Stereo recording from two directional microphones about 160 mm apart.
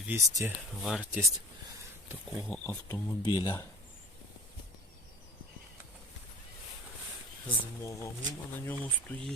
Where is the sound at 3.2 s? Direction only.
25° left (ahead or behind).